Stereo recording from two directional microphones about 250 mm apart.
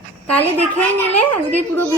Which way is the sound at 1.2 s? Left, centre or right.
Centre.